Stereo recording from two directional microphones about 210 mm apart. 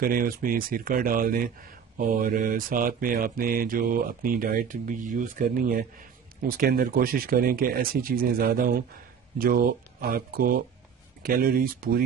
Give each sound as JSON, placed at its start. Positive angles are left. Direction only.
{"t": 0.0, "sound": "speech", "side_deg": -45}